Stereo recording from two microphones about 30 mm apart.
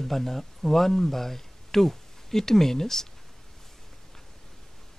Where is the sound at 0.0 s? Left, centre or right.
Centre.